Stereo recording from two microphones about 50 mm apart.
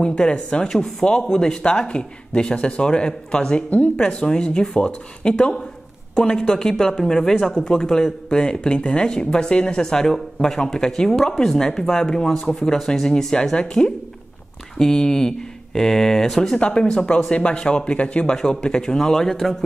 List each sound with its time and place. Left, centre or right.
0.0 s speech: left
16.5 s speech: centre
18.3 s speech: centre